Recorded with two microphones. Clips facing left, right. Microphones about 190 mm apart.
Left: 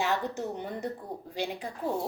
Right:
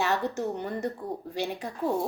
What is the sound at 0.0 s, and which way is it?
A woman's voice, 15° left (ahead or behind).